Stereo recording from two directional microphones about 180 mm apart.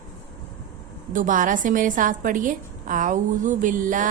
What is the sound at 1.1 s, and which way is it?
Mantra, 45° right (ahead or behind).